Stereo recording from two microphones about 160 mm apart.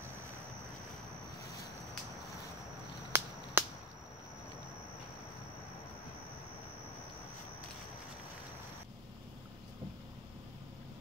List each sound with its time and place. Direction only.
3.1 s finger snapping: 15° right (ahead or behind)
3.6 s whip: 10° right (ahead or behind)